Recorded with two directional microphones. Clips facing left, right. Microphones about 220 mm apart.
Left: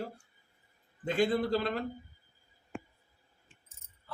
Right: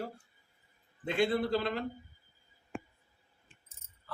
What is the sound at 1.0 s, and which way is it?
Speech, 40° left (ahead or behind).